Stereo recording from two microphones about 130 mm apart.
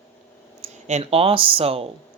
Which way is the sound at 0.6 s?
60° right (ahead or behind).